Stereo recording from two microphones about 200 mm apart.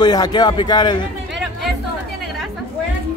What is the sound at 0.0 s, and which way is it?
A man's voice, 20° left (ahead or behind).